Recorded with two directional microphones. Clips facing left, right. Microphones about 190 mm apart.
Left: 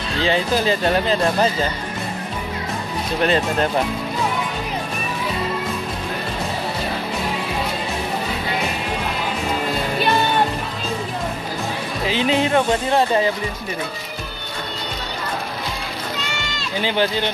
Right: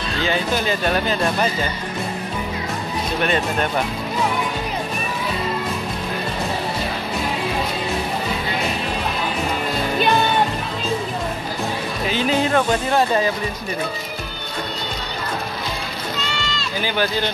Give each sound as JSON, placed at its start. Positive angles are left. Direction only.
{"t": 0.2, "sound": "speech", "side_deg": 30}
{"t": 3.2, "sound": "speech", "side_deg": 30}
{"t": 12.1, "sound": "speech", "side_deg": 25}
{"t": 16.5, "sound": "speech", "side_deg": 25}